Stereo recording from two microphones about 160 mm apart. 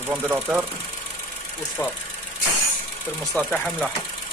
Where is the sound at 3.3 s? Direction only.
Centre (ahead or behind).